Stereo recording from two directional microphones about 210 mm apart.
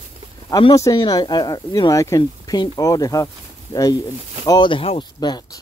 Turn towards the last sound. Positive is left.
turn(degrees=20)  # may be behind; listen again after turning